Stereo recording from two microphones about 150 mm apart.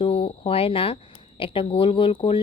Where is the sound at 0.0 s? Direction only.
40° left (ahead or behind).